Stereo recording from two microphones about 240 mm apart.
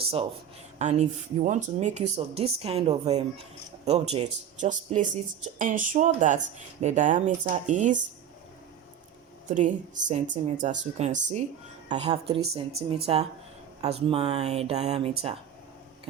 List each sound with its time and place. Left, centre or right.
0.0 s speech: right
9.5 s speech: right